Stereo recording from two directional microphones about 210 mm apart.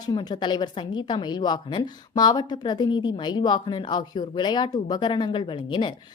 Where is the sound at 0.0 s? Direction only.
20° left (ahead or behind).